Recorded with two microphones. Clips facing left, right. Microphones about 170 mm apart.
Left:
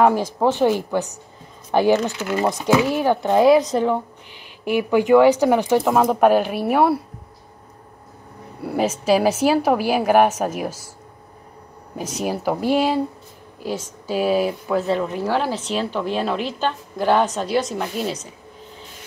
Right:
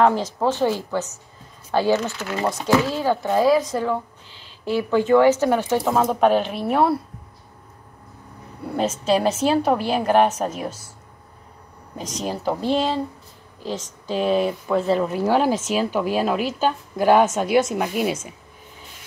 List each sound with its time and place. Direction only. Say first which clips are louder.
0.0 s speech: left 2 dB; 10° left (ahead or behind)
8.6 s speech: left 2 dB; 10° left (ahead or behind)
12.0 s speech: left 3 dB; 10° left (ahead or behind)
15.2 s a woman's voice: right 3 dB; 15° right (ahead or behind)